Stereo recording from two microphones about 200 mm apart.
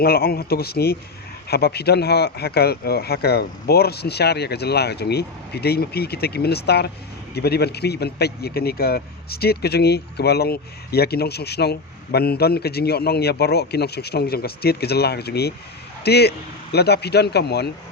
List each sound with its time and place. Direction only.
0.0 s speech: 50° left (ahead or behind)